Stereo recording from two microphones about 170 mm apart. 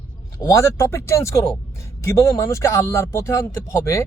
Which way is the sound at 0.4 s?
15° left (ahead or behind).